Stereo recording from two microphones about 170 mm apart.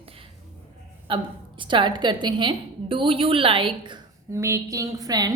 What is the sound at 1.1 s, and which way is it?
A woman's voice, 30° right (ahead or behind).